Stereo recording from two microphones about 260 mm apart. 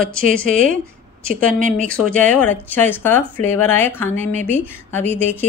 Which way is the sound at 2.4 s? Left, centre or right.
Centre.